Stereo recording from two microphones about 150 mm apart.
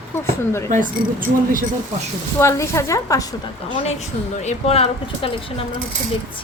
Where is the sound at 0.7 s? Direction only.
60° right (ahead or behind).